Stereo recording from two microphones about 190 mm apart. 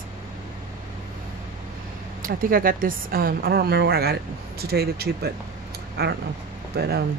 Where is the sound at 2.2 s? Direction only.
50° right (ahead or behind).